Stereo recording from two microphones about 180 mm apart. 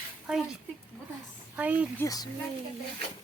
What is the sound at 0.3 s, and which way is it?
Speech, 5° right (ahead or behind).